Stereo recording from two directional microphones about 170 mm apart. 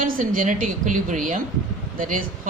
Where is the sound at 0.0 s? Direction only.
55° right (ahead or behind).